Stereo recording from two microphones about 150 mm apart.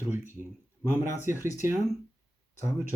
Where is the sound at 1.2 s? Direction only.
15° right (ahead or behind).